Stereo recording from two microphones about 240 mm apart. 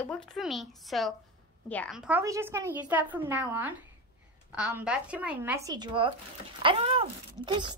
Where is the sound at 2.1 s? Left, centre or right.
Centre.